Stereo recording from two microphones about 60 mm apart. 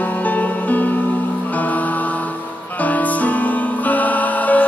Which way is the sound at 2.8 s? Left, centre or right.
Left.